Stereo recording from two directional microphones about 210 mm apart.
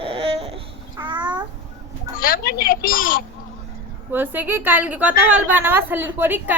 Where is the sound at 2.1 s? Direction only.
45° left (ahead or behind).